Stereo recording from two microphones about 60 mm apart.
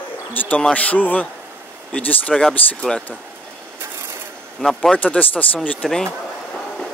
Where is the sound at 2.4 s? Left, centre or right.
Centre.